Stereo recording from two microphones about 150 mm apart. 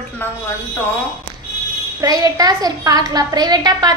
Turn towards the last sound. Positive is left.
turn(degrees=-25)  # may be behind; listen again after turning